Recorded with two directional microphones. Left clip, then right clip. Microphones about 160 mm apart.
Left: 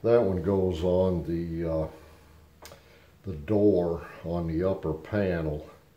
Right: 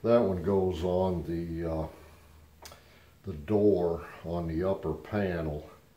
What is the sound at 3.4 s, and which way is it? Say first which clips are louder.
Speech: left 2 dB; 40° left (ahead or behind).